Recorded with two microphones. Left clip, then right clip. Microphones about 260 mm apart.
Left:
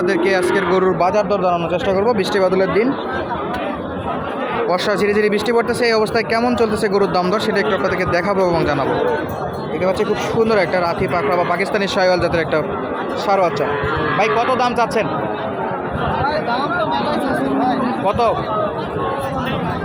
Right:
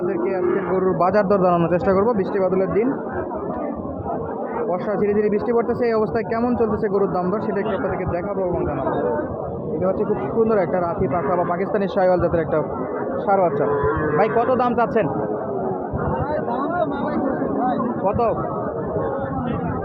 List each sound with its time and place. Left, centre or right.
0.1 s speech: centre
0.9 s speech: centre
1.5 s speech: centre
2.0 s speech: centre
4.7 s speech: centre
10.4 s speech: centre